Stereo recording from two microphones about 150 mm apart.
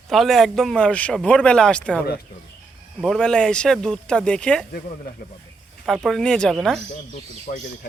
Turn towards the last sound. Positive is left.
turn(degrees=65)  # may be behind; listen again after turning